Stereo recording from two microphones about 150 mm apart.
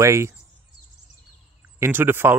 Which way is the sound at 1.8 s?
15° right (ahead or behind).